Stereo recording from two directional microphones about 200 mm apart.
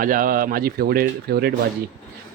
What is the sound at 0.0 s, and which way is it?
Speech, 45° right (ahead or behind).